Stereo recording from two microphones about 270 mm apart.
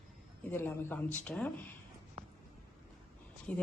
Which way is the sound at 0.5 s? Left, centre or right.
Centre.